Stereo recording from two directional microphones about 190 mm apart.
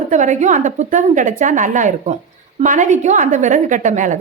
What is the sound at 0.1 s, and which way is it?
A woman's voice, 40° right (ahead or behind).